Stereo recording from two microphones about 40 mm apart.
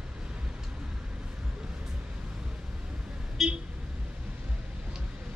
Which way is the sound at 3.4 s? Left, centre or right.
Centre.